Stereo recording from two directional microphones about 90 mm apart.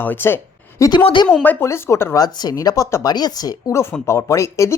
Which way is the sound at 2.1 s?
45° left (ahead or behind).